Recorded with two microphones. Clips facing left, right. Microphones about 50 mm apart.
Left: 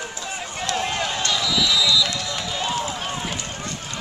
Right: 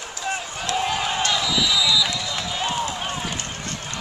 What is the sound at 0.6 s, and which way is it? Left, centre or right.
Run, centre.